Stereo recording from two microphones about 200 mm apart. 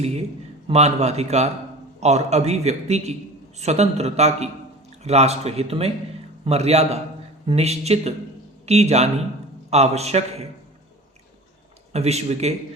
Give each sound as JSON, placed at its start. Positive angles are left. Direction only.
{"t": 0.0, "sound": "a man's voice", "side_deg": -35}
{"t": 11.9, "sound": "a man's voice", "side_deg": -30}